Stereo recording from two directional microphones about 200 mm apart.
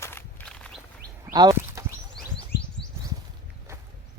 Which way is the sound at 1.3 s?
20° right (ahead or behind).